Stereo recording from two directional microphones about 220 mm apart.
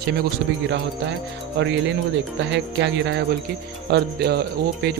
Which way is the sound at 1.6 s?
55° right (ahead or behind).